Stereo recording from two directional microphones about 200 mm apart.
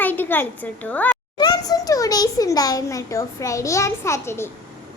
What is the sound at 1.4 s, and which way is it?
A child's voice, 20° left (ahead or behind).